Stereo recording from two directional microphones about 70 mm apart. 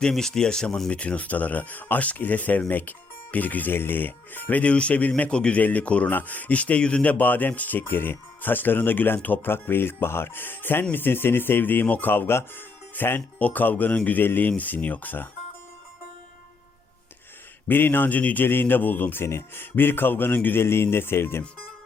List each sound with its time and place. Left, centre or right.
0.1 s speech: centre; by 15.3 s left
17.7 s speech: left